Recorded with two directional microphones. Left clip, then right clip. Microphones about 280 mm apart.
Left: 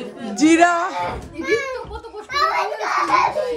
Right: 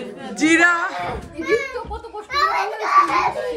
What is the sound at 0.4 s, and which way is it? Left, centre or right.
Speech, centre.